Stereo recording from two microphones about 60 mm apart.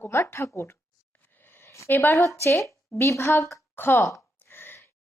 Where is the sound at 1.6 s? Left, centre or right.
Left.